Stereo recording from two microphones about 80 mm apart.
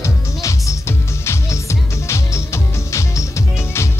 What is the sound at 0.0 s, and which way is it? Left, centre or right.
Music, left.